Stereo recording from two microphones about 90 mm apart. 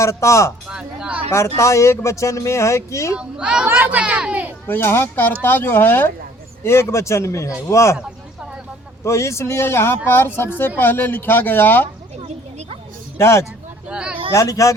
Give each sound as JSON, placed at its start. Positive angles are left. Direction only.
{"t": 0.0, "sound": "speech", "side_deg": 35}
{"t": 0.7, "sound": "a sound", "side_deg": -10}
{"t": 1.3, "sound": "speech", "side_deg": 30}
{"t": 3.2, "sound": "a child's voice", "side_deg": -10}
{"t": 4.6, "sound": "speech", "side_deg": 25}
{"t": 9.0, "sound": "speech", "side_deg": 30}
{"t": 13.1, "sound": "speech", "side_deg": 30}
{"t": 13.8, "sound": "a child's voice", "side_deg": -10}
{"t": 14.3, "sound": "speech", "side_deg": 35}